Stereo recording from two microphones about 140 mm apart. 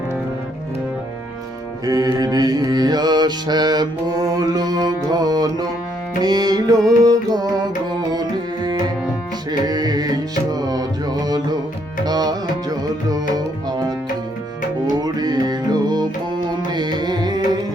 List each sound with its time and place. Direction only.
1.8 s music: 30° right (ahead or behind)
14.9 s music: 30° right (ahead or behind)